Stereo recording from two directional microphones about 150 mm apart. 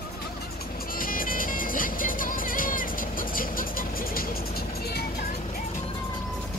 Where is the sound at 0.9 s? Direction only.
70° left (ahead or behind).